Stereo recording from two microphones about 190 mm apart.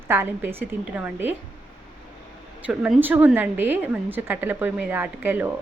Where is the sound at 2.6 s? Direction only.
5° right (ahead or behind).